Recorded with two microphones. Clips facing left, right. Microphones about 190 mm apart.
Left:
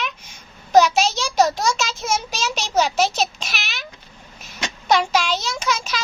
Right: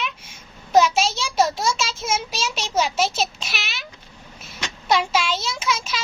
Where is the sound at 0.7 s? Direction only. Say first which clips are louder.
Left 2 dB; 40° left (ahead or behind).